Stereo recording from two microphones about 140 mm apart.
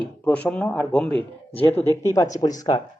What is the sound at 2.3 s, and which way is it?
Speech, 25° left (ahead or behind).